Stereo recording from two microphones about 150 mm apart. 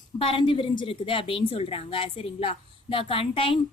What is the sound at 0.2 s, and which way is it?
A woman's voice, 35° left (ahead or behind).